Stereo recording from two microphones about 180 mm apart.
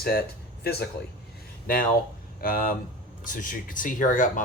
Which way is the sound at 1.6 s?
55° left (ahead or behind).